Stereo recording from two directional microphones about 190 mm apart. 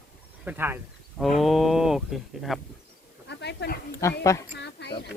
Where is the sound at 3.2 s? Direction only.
60° left (ahead or behind).